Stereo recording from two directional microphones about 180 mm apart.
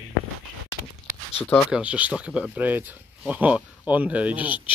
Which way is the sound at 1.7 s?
5° right (ahead or behind).